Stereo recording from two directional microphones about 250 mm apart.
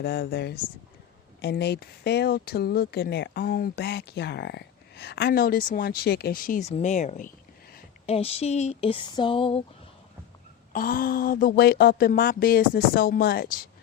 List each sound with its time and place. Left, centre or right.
0.0 s speech: left
10.7 s speech: left